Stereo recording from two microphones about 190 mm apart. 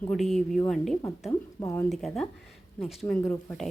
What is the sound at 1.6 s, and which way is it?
Speech, 15° left (ahead or behind).